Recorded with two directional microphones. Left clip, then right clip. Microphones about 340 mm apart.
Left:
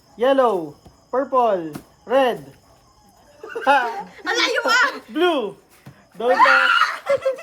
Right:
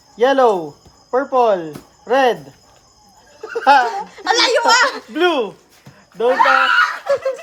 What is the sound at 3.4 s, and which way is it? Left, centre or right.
Goat, right.